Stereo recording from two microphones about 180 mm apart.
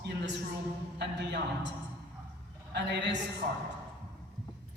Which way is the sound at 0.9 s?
70° right (ahead or behind).